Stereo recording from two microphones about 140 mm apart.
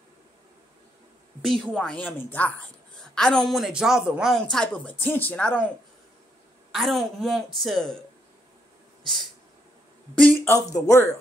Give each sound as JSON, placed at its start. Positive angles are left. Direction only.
{"t": 1.4, "sound": "a woman's voice", "side_deg": 5}
{"t": 6.7, "sound": "a woman's voice", "side_deg": 0}
{"t": 9.0, "sound": "a sound", "side_deg": 0}
{"t": 10.1, "sound": "speech", "side_deg": 15}